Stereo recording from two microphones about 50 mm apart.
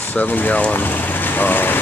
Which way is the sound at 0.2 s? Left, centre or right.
Left.